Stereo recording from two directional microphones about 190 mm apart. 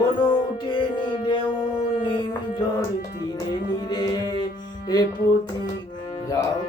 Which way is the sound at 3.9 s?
20° left (ahead or behind).